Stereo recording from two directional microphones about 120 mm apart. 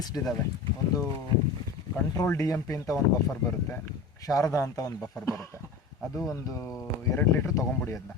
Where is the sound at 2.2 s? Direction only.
25° left (ahead or behind).